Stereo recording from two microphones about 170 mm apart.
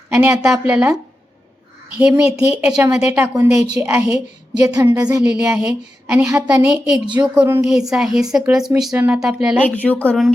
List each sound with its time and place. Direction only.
0.1 s a woman's voice: 10° right (ahead or behind)
2.0 s a woman's voice: 5° right (ahead or behind)
5.4 s a woman's voice: 10° right (ahead or behind)
6.7 s a woman's voice: 5° right (ahead or behind)
9.6 s speech: 10° left (ahead or behind)